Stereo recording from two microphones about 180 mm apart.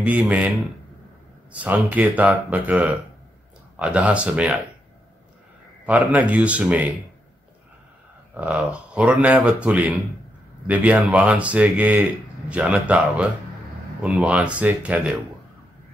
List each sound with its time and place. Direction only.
0.0 s speech: 10° right (ahead or behind)
1.5 s speech: 10° right (ahead or behind)
5.9 s speech: 10° right (ahead or behind)
8.4 s speech: 10° right (ahead or behind)